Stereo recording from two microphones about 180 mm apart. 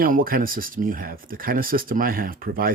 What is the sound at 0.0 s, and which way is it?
Speech, 50° right (ahead or behind).